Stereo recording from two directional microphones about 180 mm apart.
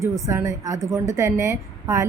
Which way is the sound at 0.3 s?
15° right (ahead or behind).